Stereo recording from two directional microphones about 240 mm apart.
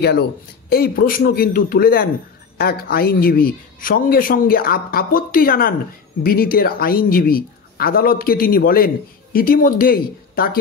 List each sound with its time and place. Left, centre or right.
0.7 s a woman's voice: left